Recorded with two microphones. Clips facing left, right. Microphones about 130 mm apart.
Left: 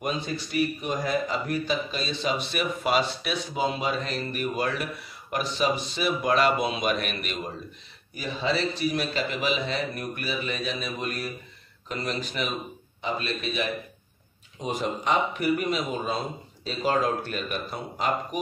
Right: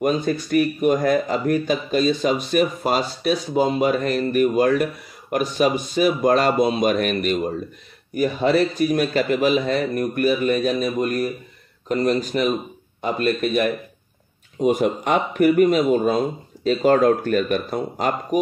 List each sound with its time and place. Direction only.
0.0 s speech: 50° right (ahead or behind)